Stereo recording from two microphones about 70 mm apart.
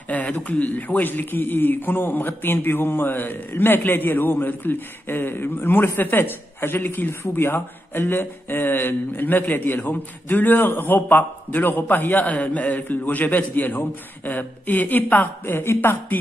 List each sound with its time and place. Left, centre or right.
0.1 s a man's voice: left